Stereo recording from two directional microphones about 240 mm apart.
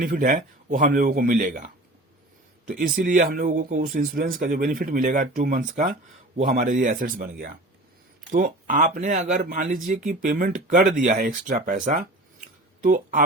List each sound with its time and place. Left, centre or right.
0.0 s speech: right
2.6 s speech: right